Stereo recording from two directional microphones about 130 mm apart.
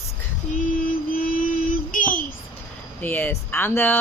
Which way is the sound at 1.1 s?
90° left.